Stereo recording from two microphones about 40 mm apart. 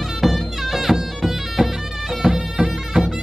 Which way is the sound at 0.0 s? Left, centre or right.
Centre.